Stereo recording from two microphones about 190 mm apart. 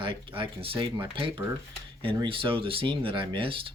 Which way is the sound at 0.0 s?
25° right (ahead or behind).